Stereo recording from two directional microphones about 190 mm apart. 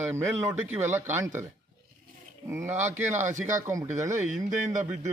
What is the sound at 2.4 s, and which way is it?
Speech, 15° right (ahead or behind).